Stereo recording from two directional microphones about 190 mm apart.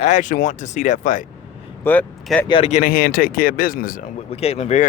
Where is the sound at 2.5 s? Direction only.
35° left (ahead or behind).